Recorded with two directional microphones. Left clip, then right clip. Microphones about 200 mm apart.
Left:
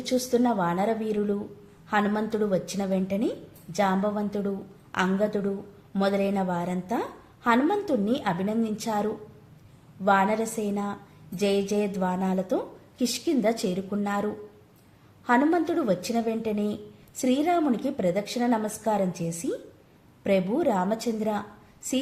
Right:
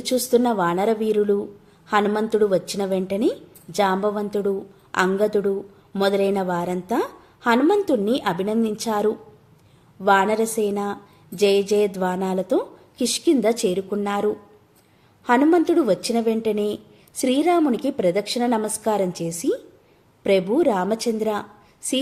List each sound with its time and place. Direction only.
0.0 s a woman's voice: 35° right (ahead or behind)